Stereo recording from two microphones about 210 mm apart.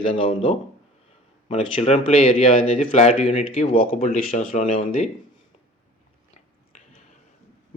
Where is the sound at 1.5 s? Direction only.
25° left (ahead or behind).